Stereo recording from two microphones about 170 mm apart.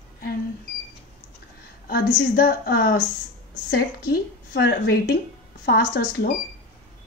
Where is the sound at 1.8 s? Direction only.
60° left (ahead or behind).